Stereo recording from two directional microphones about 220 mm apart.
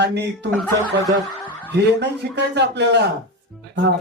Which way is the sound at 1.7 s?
50° right (ahead or behind).